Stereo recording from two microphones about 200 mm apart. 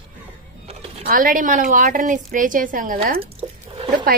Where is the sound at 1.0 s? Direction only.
45° right (ahead or behind).